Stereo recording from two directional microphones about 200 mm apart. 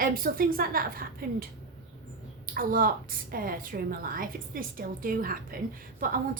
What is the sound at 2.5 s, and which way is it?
A woman's voice, 45° right (ahead or behind).